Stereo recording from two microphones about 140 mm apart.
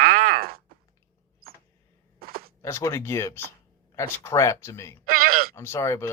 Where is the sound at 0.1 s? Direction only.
90° right.